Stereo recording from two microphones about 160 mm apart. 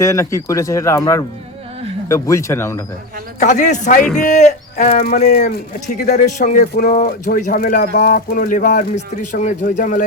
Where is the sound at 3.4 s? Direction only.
50° left (ahead or behind).